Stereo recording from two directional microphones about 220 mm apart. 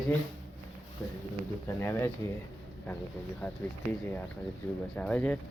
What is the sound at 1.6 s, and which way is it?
Speech, 10° left (ahead or behind).